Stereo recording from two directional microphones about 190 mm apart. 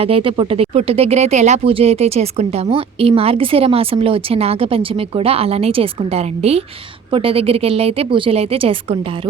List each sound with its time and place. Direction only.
0.0 s speech: 30° right (ahead or behind)